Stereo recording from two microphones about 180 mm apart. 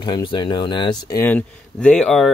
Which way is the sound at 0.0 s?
25° left (ahead or behind).